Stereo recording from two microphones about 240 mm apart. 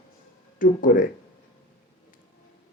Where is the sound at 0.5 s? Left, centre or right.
Left.